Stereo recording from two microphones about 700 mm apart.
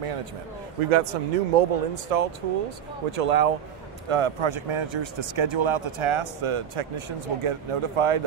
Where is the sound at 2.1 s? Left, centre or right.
Right.